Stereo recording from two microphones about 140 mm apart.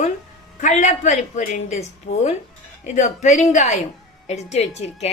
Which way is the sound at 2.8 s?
60° left (ahead or behind).